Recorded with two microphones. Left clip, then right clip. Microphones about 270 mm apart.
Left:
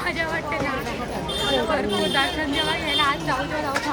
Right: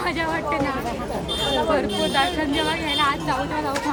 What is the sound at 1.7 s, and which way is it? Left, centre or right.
A woman's voice, centre.